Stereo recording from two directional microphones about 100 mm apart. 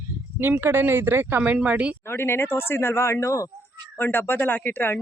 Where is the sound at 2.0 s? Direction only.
25° left (ahead or behind).